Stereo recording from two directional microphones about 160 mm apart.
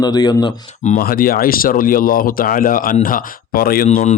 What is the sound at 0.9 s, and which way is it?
Speech, 65° left (ahead or behind).